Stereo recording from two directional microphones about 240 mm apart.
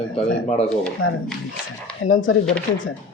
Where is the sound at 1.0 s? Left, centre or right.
Left.